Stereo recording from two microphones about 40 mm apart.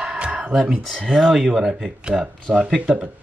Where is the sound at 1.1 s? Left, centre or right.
Centre.